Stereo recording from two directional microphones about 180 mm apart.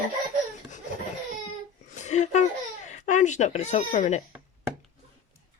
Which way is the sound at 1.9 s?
40° left (ahead or behind).